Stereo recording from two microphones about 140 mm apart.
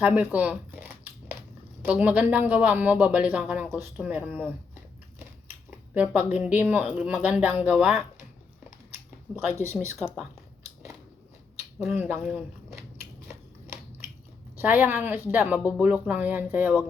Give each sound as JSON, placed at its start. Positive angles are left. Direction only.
{"t": 0.0, "sound": "scissors", "side_deg": -10}
{"t": 1.8, "sound": "speech", "side_deg": -10}
{"t": 5.9, "sound": "speech", "side_deg": -10}
{"t": 9.3, "sound": "speech", "side_deg": -5}
{"t": 11.9, "sound": "speech", "side_deg": -15}
{"t": 12.2, "sound": "speech", "side_deg": -5}
{"t": 14.6, "sound": "speech", "side_deg": -15}